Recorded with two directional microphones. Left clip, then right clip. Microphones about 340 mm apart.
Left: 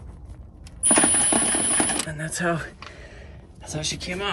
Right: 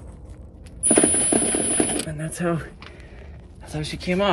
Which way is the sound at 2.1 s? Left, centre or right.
Left.